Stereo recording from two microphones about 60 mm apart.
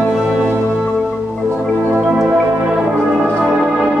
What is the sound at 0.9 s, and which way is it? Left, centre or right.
Music, centre.